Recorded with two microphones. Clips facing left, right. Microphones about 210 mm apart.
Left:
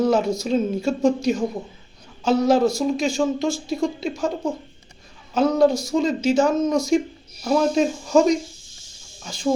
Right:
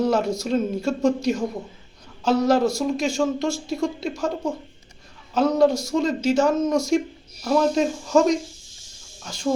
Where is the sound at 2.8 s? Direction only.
Centre (ahead or behind).